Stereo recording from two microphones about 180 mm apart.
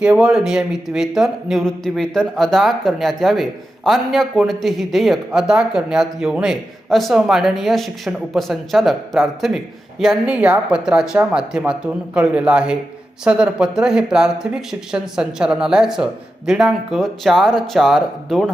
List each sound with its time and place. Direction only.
0.0 s speech: 5° right (ahead or behind)